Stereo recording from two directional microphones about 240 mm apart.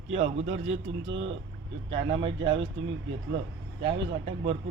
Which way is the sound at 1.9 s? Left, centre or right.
Right.